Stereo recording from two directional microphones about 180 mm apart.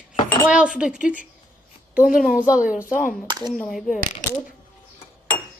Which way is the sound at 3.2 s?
20° right (ahead or behind).